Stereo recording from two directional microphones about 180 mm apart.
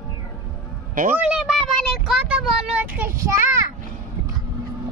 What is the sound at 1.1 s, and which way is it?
Speech, 5° right (ahead or behind).